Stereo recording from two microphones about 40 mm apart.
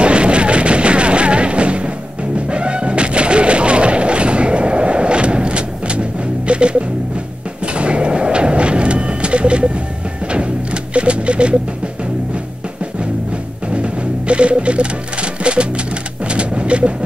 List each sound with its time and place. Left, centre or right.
0.0 s music: right
7.6 s a sound: right
10.3 s music: right
13.7 s music: right
16.3 s pigeon: right